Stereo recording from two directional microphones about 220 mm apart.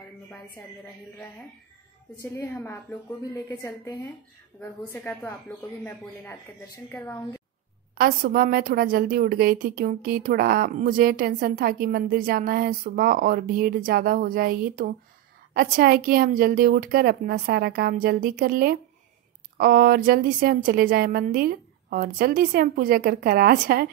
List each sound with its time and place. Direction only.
2.2 s a woman's voice: 10° left (ahead or behind)
6.9 s a woman's voice: 10° left (ahead or behind)
7.9 s a woman's voice: 40° right (ahead or behind)